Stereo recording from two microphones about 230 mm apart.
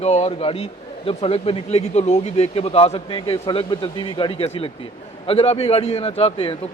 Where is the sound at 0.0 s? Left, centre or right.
Left.